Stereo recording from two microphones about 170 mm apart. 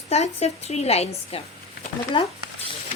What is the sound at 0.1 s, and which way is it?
A woman's voice, 40° left (ahead or behind).